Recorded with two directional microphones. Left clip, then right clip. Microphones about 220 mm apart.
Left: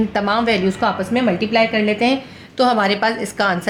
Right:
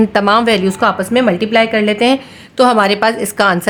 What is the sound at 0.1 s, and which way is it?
A woman's voice, 40° right (ahead or behind).